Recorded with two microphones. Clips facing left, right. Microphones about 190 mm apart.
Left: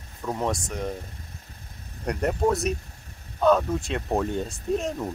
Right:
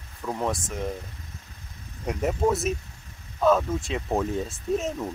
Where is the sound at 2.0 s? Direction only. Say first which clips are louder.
Even; centre (ahead or behind).